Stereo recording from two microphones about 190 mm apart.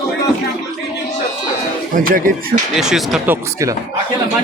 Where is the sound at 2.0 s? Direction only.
50° right (ahead or behind).